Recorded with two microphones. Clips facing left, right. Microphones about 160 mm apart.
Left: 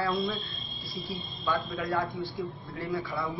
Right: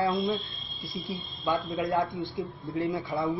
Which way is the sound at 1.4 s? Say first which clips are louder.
Right 3 dB; 20° right (ahead or behind).